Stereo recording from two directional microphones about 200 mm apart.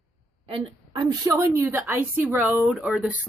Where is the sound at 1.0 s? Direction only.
15° right (ahead or behind).